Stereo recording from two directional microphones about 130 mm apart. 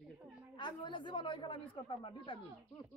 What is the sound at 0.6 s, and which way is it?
A man's voice, 35° left (ahead or behind).